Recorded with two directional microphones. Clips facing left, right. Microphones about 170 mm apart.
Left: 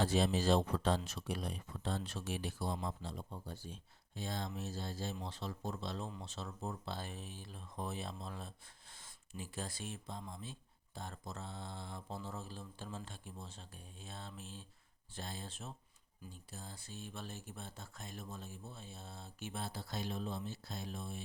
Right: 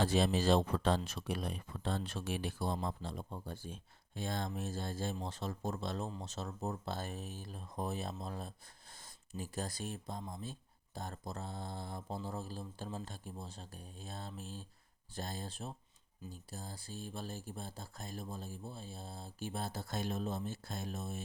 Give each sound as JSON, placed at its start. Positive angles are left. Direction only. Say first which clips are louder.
{"t": 0.0, "sound": "speech", "louder": "right 2 dB", "side_deg": -70}
{"t": 6.1, "sound": "speech", "louder": "right 3 dB", "side_deg": -35}